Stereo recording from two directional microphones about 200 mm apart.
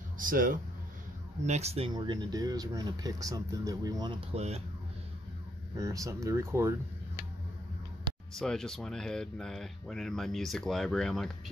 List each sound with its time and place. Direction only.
0.2 s speech: 45° right (ahead or behind)
5.8 s speech: 15° right (ahead or behind)
8.4 s speech: centre (ahead or behind)